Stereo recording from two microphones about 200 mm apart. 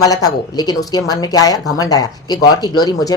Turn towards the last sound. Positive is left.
turn(degrees=20)  # may be behind; listen again after turning